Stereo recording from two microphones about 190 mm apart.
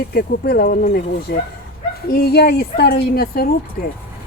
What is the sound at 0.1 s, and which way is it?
A woman's voice, 55° left (ahead or behind).